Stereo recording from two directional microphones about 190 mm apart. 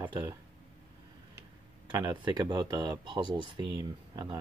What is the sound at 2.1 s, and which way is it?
Speech, 25° right (ahead or behind).